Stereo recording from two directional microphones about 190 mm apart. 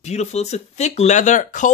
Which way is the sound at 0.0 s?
35° left (ahead or behind).